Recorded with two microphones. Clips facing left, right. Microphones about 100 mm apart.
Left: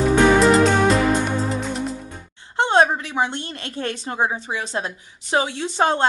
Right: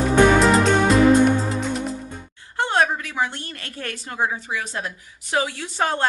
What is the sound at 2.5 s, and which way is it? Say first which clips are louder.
A woman's voice: left 4 dB; 25° left (ahead or behind).